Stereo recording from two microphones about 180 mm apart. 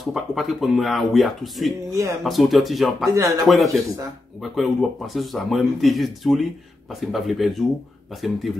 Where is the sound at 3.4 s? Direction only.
Centre (ahead or behind).